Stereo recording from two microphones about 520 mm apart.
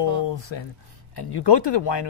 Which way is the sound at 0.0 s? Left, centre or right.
Left.